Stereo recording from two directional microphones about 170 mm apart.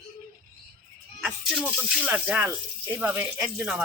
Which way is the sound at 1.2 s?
5° right (ahead or behind).